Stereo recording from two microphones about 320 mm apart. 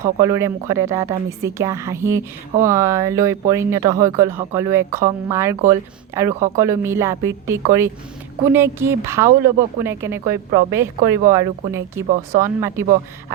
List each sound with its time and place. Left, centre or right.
0.2 s a woman's voice: centre